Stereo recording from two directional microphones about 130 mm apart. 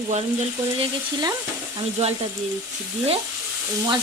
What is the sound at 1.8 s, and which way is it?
Sizzle, 55° right (ahead or behind).